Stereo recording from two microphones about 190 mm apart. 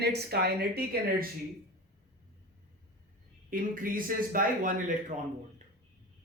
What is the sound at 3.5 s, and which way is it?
Speech, 45° right (ahead or behind).